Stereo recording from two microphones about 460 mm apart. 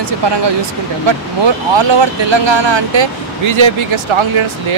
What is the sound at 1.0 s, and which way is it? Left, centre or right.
Speech, right.